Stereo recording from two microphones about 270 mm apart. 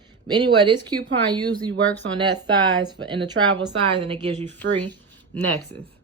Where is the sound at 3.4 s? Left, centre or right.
Right.